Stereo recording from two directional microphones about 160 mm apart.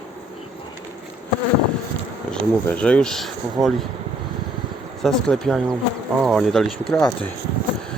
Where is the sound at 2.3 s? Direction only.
5° left (ahead or behind).